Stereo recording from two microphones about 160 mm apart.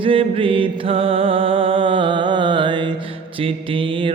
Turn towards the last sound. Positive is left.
turn(degrees=-30)  # may be behind; listen again after turning